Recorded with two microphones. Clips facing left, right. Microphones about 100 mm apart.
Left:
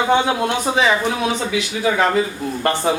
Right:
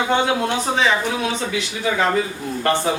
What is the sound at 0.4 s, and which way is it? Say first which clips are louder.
Speech: left 2 dB; 10° left (ahead or behind).